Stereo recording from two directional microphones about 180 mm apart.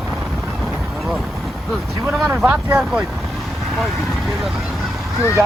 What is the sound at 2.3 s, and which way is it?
Speech, 5° right (ahead or behind).